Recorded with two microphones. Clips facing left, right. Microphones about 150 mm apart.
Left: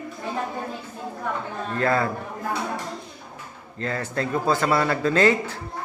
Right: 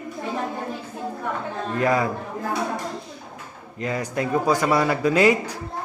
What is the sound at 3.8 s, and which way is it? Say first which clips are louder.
A man's voice: right 2 dB; 15° right (ahead or behind).